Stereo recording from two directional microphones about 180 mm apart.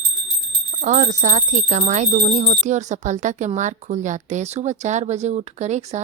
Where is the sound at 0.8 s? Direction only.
45° right (ahead or behind).